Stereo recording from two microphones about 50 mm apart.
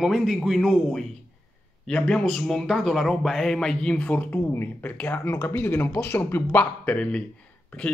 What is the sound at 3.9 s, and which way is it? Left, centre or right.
Speech, left.